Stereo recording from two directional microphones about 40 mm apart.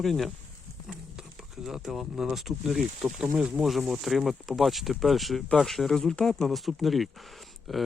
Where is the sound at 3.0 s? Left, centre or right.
Centre.